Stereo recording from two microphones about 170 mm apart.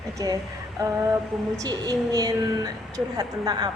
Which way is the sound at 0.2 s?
20° right (ahead or behind).